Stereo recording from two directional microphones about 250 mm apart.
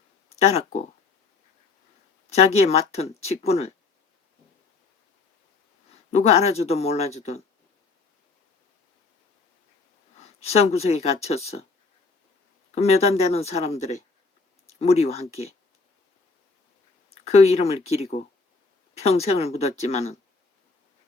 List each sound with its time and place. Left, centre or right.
0.3 s speech: left
2.3 s speech: left
5.9 s speech: left
10.2 s speech: left
12.7 s speech: left
17.2 s speech: left